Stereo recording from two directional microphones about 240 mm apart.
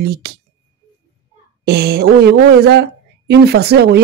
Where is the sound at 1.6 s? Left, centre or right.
Right.